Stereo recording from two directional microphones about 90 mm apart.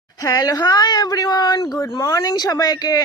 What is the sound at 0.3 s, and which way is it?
Speech, 40° left (ahead or behind).